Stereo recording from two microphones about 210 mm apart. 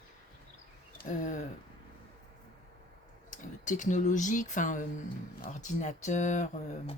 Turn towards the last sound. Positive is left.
turn(degrees=35)  # may be behind; listen again after turning